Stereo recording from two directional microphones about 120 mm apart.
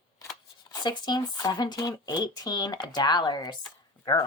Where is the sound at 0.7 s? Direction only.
35° left (ahead or behind).